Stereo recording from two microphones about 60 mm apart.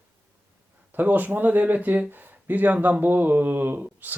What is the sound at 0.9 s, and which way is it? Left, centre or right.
Speech, right.